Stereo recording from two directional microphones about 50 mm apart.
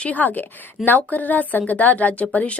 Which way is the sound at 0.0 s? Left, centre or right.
Left.